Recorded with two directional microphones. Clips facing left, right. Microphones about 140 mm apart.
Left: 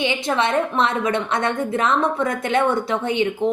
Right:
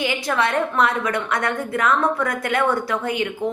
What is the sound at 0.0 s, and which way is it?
A woman's voice, 25° left (ahead or behind).